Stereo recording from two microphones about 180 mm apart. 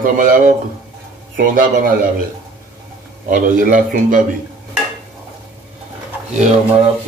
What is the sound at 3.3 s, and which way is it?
Speech, 50° right (ahead or behind).